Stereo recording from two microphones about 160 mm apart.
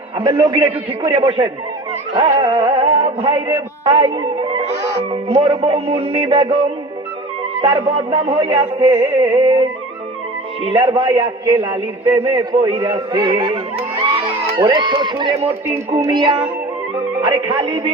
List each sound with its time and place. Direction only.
0.2 s a man's voice: 30° right (ahead or behind)
2.4 s music: 30° right (ahead or behind)
7.6 s music: 35° right (ahead or behind)
9.0 s a man's voice: 20° right (ahead or behind)
10.7 s music: 30° right (ahead or behind)
11.1 s a man's voice: 20° right (ahead or behind)
13.1 s music: 30° right (ahead or behind)
14.2 s a man's voice: 35° right (ahead or behind)
17.2 s music: 30° right (ahead or behind)